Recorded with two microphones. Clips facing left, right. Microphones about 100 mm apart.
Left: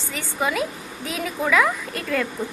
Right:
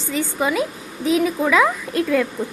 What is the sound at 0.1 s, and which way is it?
A woman's voice, 20° right (ahead or behind).